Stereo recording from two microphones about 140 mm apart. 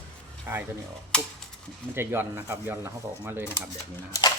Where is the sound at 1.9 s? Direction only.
15° right (ahead or behind).